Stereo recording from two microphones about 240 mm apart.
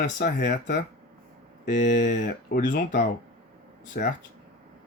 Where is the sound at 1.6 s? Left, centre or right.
Left.